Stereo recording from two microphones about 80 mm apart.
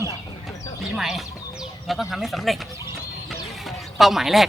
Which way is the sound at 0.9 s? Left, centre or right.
Centre.